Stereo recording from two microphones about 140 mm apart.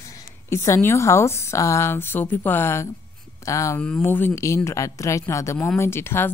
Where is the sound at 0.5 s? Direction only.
20° left (ahead or behind).